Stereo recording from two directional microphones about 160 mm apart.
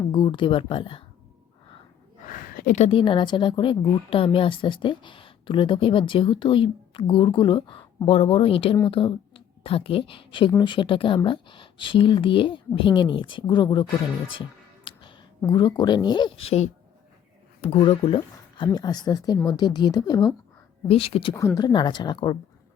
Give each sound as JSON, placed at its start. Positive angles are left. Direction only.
{"t": 0.1, "sound": "speech", "side_deg": 30}
{"t": 2.2, "sound": "a woman's voice", "side_deg": 60}
{"t": 14.8, "sound": "a sound", "side_deg": 30}
{"t": 15.4, "sound": "speech", "side_deg": 30}
{"t": 20.8, "sound": "speech", "side_deg": 35}
{"t": 21.3, "sound": "speech", "side_deg": 20}